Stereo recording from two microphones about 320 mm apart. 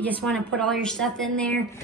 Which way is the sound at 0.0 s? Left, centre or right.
Centre.